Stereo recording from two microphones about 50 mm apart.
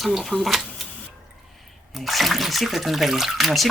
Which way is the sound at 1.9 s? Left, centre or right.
Centre.